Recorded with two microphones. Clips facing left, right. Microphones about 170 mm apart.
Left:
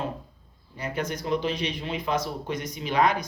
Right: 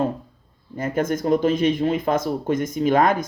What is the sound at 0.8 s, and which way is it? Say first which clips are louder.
Speech: right 8 dB; 50° right (ahead or behind).